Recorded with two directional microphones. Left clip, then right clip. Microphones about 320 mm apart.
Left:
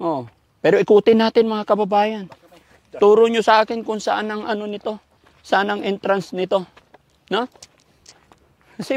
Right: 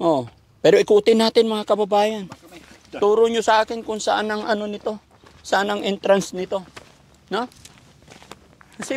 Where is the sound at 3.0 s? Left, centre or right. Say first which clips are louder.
Left 4 dB; left.